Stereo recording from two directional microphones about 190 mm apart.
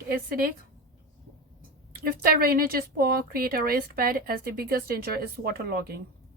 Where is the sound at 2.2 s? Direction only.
50° right (ahead or behind).